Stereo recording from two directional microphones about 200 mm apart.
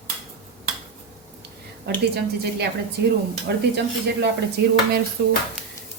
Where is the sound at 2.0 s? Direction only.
55° right (ahead or behind).